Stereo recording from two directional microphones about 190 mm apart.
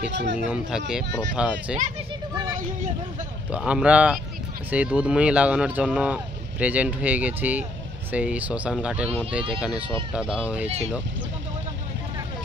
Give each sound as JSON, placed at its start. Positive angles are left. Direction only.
{"t": 0.1, "sound": "speech", "side_deg": -65}
{"t": 0.5, "sound": "speech", "side_deg": -5}
{"t": 3.5, "sound": "speech", "side_deg": -5}